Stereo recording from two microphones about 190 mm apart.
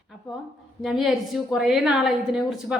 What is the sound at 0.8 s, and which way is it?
A woman's voice, centre (ahead or behind).